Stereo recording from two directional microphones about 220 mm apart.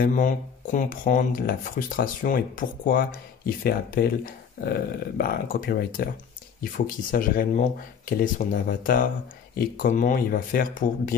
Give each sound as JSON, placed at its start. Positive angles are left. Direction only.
{"t": 0.0, "sound": "speech", "side_deg": 35}
{"t": 7.1, "sound": "speech", "side_deg": 40}